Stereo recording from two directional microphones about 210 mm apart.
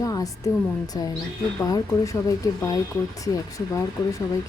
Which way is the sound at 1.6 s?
15° left (ahead or behind).